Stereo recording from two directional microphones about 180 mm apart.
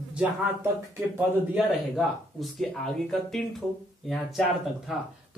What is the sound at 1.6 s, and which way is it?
Speech, centre (ahead or behind).